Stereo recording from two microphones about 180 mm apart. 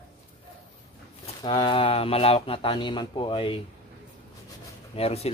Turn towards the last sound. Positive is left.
turn(degrees=35)  # may be behind; listen again after turning